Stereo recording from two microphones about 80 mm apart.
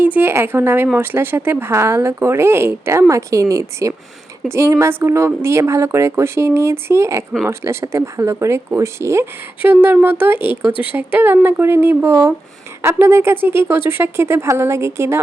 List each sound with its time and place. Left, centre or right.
0.0 s speech: right
3.1 s speech: right
9.6 s speech: right